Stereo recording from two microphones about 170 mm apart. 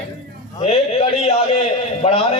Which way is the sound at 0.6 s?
40° left (ahead or behind).